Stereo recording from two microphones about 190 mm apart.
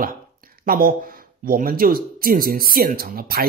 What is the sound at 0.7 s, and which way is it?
Speech, 50° right (ahead or behind).